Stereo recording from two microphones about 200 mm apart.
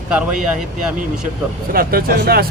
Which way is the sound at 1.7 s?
45° right (ahead or behind).